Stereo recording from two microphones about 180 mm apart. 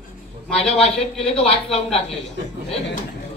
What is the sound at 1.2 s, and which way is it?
Speech, 35° left (ahead or behind).